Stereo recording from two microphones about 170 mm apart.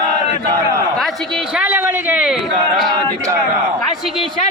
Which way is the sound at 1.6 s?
10° right (ahead or behind).